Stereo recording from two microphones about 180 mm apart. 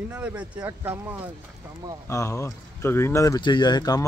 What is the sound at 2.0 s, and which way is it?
Speech, 15° left (ahead or behind).